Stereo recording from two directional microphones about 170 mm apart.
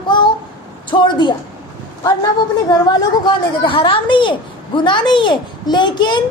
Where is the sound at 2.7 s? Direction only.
25° left (ahead or behind).